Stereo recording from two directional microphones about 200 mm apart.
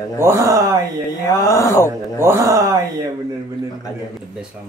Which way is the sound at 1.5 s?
15° left (ahead or behind).